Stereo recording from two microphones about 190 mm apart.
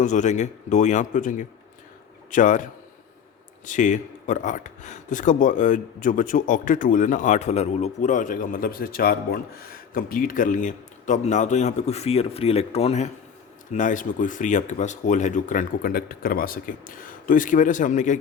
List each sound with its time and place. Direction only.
0.0 s speech: 40° left (ahead or behind)
3.7 s speech: 40° left (ahead or behind)